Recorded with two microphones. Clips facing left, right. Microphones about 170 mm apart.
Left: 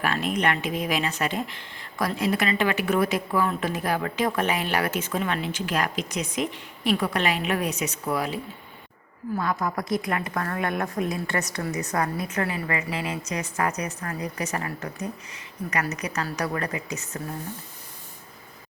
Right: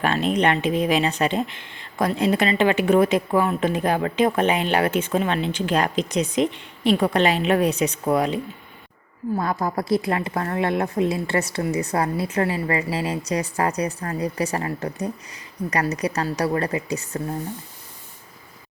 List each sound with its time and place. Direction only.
0.0 s a woman's voice: 25° right (ahead or behind)